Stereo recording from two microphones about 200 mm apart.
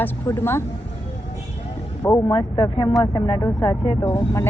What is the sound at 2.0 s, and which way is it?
Speech, 20° left (ahead or behind).